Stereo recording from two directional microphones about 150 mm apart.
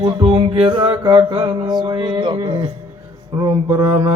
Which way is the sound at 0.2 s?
35° right (ahead or behind).